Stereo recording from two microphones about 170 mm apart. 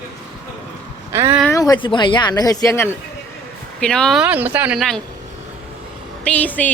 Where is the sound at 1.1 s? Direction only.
15° right (ahead or behind).